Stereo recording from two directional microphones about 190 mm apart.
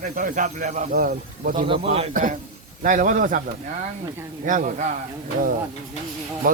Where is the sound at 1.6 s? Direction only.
30° right (ahead or behind); by 3.4 s 45° right (ahead or behind).